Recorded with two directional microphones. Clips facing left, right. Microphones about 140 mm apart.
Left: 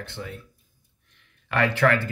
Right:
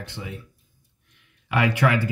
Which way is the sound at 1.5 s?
15° right (ahead or behind).